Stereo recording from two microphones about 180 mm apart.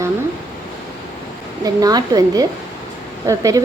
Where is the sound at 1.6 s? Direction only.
20° right (ahead or behind).